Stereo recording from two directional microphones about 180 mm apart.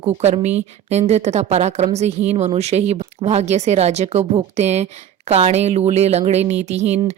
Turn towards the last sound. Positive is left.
turn(degrees=-40)  # may be behind; listen again after turning